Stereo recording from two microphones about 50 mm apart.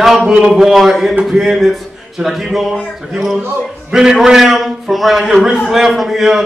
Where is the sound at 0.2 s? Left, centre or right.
Centre.